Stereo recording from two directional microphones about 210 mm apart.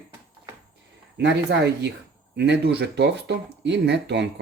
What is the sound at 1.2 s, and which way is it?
Speech, 55° right (ahead or behind).